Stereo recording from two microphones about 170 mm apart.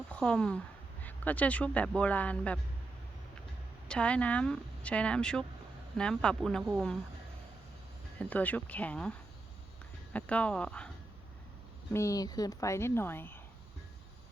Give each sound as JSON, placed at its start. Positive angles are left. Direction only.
{"t": 0.1, "sound": "speech", "side_deg": 5}
{"t": 3.8, "sound": "speech", "side_deg": 5}
{"t": 8.2, "sound": "speech", "side_deg": 10}
{"t": 11.9, "sound": "speech", "side_deg": 20}